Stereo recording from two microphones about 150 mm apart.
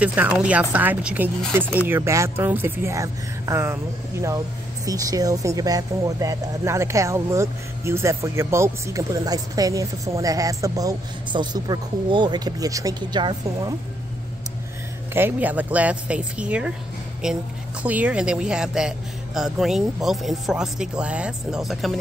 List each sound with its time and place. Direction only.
0.0 s speech: 10° right (ahead or behind)
4.8 s speech: 25° right (ahead or behind)
15.1 s a man's voice: 10° right (ahead or behind)